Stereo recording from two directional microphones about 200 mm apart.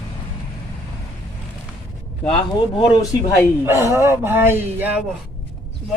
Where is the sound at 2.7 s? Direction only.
20° left (ahead or behind).